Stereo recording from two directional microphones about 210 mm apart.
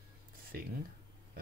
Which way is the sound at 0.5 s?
45° right (ahead or behind).